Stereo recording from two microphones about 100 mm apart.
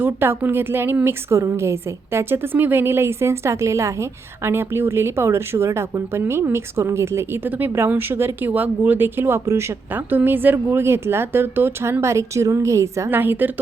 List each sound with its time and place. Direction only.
0.0 s speech: 20° right (ahead or behind)
13.1 s speech: 20° right (ahead or behind)